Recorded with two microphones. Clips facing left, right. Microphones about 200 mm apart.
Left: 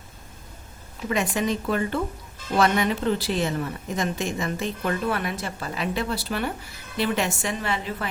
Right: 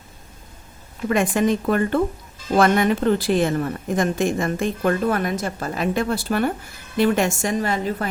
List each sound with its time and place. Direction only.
1.0 s a woman's voice: 50° right (ahead or behind)